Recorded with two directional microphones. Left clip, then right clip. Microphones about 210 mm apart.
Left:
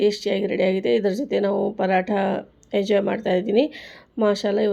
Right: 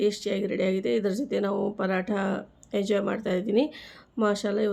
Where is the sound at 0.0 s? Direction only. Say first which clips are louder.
Left 6 dB; 5° left (ahead or behind).